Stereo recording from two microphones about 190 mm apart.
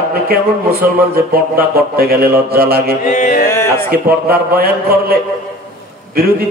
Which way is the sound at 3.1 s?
40° left (ahead or behind).